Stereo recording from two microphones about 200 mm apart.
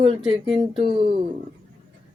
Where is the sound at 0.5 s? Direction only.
25° right (ahead or behind).